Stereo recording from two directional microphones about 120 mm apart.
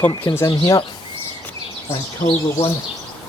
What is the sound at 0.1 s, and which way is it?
Speech, 30° left (ahead or behind).